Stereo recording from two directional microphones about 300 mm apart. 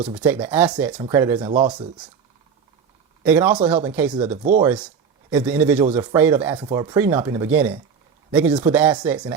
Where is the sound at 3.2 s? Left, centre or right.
Centre.